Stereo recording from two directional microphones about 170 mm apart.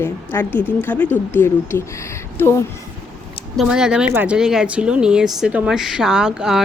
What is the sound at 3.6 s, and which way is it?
Speech, 5° right (ahead or behind).